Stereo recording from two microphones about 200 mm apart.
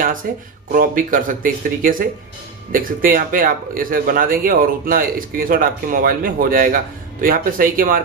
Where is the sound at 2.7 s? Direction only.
45° right (ahead or behind).